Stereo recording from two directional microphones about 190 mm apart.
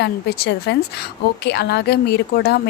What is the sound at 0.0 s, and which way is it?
A woman's voice, 60° left (ahead or behind).